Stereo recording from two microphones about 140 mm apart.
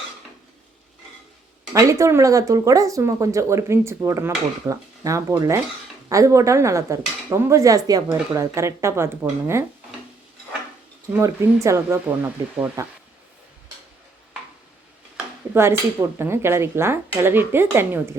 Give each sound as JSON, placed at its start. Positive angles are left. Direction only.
{"t": 1.7, "sound": "speech", "side_deg": -20}
{"t": 11.1, "sound": "speech", "side_deg": -20}
{"t": 16.1, "sound": "speech", "side_deg": -15}